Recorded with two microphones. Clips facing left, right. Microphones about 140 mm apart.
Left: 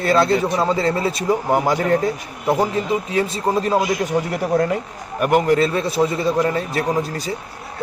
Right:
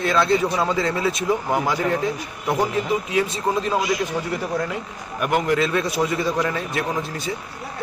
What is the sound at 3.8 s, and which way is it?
A man's voice, 50° left (ahead or behind).